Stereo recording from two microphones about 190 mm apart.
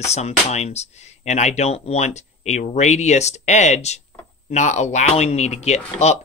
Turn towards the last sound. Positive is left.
turn(degrees=35)  # may be behind; listen again after turning